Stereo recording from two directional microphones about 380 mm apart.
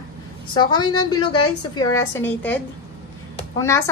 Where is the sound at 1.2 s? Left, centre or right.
Left.